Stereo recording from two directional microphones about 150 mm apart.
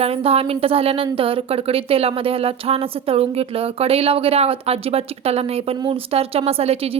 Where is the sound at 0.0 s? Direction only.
40° right (ahead or behind).